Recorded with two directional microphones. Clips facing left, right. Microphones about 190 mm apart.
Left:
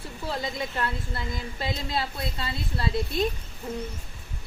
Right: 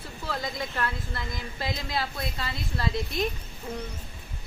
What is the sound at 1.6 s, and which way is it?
Speech, 30° left (ahead or behind).